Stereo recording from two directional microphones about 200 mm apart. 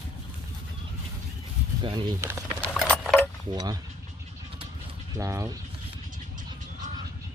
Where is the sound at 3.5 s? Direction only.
20° right (ahead or behind).